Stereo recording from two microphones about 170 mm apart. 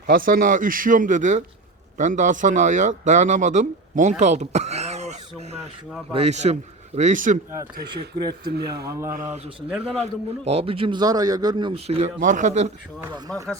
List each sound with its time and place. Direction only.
0.1 s speech: 55° right (ahead or behind)
4.2 s a sound: 45° right (ahead or behind)
6.1 s speech: 40° right (ahead or behind)
7.8 s speech: 70° right (ahead or behind)
8.8 s speech: 15° right (ahead or behind)
9.1 s a man's voice: 45° right (ahead or behind)
13.0 s speech: 20° right (ahead or behind)